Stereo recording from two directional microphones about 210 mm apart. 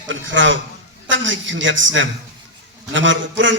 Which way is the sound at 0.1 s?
65° right (ahead or behind).